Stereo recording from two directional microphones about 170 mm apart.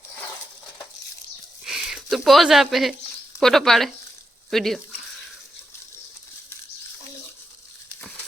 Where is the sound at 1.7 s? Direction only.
Centre (ahead or behind).